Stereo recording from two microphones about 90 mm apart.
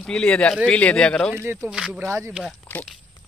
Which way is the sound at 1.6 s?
10° right (ahead or behind).